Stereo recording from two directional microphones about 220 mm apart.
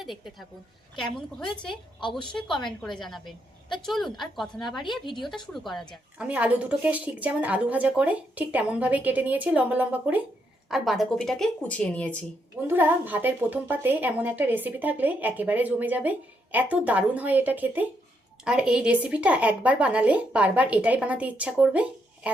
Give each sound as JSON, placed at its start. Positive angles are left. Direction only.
{"t": 0.0, "sound": "a woman's voice", "side_deg": 0}
{"t": 2.0, "sound": "a woman's voice", "side_deg": 20}
{"t": 2.8, "sound": "a woman's voice", "side_deg": 0}
{"t": 12.6, "sound": "a woman's voice", "side_deg": -10}